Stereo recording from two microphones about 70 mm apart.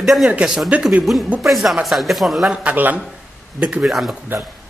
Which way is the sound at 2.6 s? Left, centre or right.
Right.